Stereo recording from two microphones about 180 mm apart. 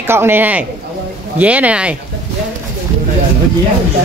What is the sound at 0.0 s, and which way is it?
Speech, 10° right (ahead or behind).